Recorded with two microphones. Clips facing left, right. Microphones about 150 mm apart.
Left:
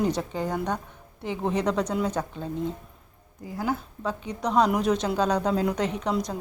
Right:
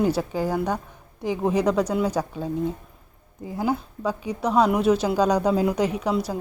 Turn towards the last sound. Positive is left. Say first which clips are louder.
# right 3 dB
turn(degrees=-5)  # may be behind; listen again after turning